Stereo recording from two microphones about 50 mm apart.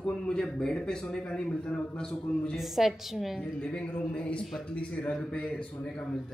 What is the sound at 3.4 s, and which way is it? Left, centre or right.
A man's voice, left.